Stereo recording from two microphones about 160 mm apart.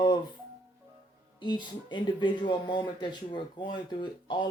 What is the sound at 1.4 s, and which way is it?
Speech, 30° left (ahead or behind).